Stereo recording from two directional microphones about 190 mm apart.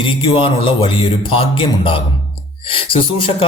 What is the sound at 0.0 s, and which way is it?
Speech, 25° left (ahead or behind).